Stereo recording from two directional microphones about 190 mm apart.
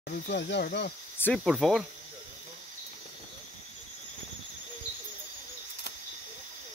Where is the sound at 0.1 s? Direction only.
65° left (ahead or behind).